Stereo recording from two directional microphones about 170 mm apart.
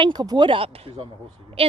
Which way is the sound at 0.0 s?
25° right (ahead or behind).